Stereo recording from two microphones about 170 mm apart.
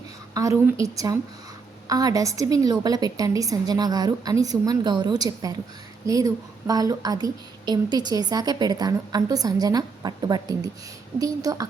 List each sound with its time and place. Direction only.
0.3 s a woman's voice: 20° right (ahead or behind)